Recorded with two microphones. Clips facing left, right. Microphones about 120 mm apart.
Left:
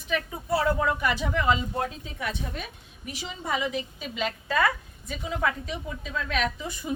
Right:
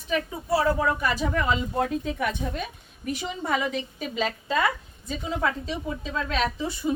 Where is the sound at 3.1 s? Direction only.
50° right (ahead or behind).